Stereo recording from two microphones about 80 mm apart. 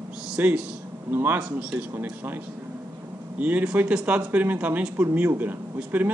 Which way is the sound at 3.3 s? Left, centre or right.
Right.